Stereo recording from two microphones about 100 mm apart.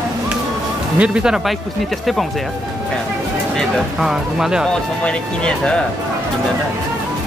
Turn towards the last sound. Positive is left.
turn(degrees=10)  # may be behind; listen again after turning